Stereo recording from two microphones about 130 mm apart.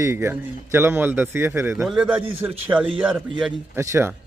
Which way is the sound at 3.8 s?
20° right (ahead or behind).